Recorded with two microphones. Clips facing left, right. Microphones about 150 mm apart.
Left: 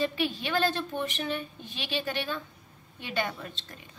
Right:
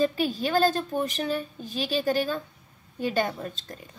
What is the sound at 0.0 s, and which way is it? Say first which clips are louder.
A woman's voice: right 5 dB; 40° right (ahead or behind).